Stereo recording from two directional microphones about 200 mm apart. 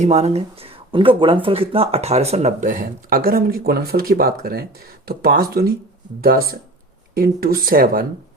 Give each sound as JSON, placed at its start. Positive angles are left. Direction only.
{"t": 0.0, "sound": "speech", "side_deg": -35}